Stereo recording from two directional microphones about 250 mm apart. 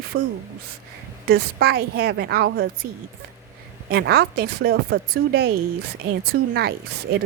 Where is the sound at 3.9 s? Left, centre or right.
Right.